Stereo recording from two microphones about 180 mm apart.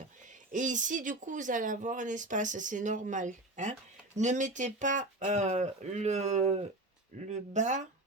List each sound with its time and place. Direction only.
0.5 s speech: 45° right (ahead or behind)